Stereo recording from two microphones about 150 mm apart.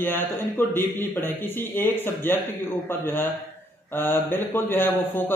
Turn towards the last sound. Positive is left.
turn(degrees=15)  # may be behind; listen again after turning